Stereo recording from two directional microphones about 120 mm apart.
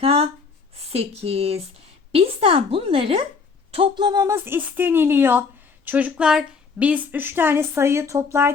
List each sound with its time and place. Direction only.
0.0 s a woman's voice: 50° right (ahead or behind)
4.0 s speech: 35° right (ahead or behind)
4.4 s a woman's voice: 20° right (ahead or behind)